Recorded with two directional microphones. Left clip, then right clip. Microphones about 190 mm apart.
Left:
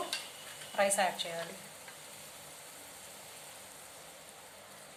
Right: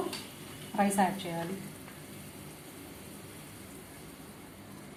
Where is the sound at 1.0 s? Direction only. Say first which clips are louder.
Right 2 dB; 20° left (ahead or behind).